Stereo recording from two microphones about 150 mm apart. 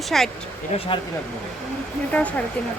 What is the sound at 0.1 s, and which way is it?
Speech, 5° left (ahead or behind).